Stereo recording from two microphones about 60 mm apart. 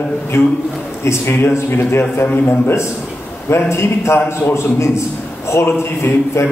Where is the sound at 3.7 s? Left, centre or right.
Left.